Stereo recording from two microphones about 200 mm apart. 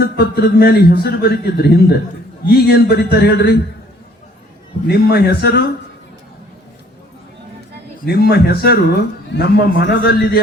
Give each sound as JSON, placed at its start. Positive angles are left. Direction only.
{"t": 0.0, "sound": "a man's voice", "side_deg": 50}
{"t": 4.9, "sound": "a man's voice", "side_deg": 55}
{"t": 8.0, "sound": "a man's voice", "side_deg": 50}